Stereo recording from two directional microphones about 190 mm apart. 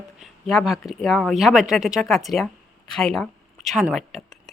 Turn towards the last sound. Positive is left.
turn(degrees=0)  # may be behind; listen again after turning